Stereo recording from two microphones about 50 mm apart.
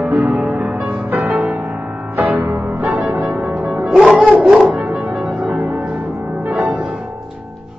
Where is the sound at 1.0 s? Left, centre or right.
Right.